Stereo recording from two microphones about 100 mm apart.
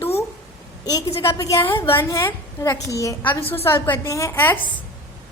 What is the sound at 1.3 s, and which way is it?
A woman's voice, 35° left (ahead or behind).